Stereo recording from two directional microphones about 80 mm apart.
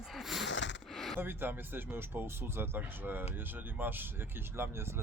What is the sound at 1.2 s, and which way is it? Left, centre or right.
Speech, right.